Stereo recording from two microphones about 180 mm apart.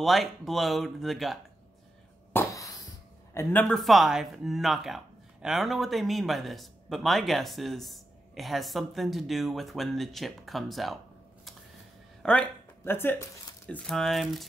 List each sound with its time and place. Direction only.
0.0 s speech: centre (ahead or behind)
2.3 s a sound: 15° left (ahead or behind)
3.3 s speech: 5° left (ahead or behind)
12.2 s speech: 5° left (ahead or behind)